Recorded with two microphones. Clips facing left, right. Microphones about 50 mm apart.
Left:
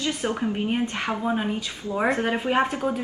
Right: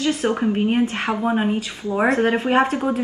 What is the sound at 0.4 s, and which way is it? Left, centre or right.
Speech, right.